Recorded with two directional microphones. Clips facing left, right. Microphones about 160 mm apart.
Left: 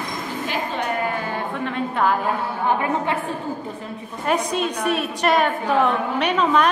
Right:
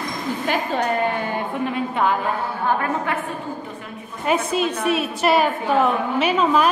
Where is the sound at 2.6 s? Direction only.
15° left (ahead or behind).